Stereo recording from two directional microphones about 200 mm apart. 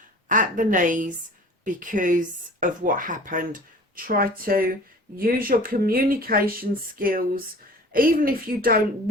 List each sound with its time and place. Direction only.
0.3 s a woman's voice: 40° right (ahead or behind)